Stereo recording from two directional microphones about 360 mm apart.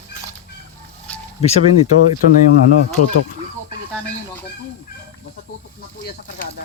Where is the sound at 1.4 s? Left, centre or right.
Centre.